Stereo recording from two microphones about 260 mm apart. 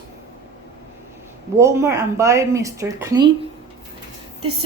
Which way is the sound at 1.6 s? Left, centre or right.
Centre.